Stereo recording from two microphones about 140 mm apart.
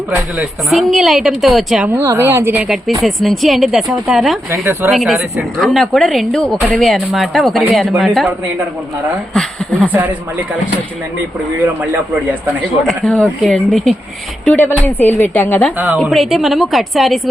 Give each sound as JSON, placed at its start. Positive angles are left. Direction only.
{"t": 0.3, "sound": "speech", "side_deg": 0}
{"t": 2.0, "sound": "speech", "side_deg": -20}
{"t": 3.0, "sound": "speech", "side_deg": 0}
{"t": 4.5, "sound": "speech", "side_deg": -20}
{"t": 4.9, "sound": "speech", "side_deg": 0}
{"t": 9.3, "sound": "speech", "side_deg": 5}
{"t": 9.9, "sound": "speech", "side_deg": -10}
{"t": 11.6, "sound": "speech", "side_deg": -10}
{"t": 12.9, "sound": "speech", "side_deg": 5}
{"t": 14.6, "sound": "speech", "side_deg": 15}
{"t": 16.0, "sound": "speech", "side_deg": 0}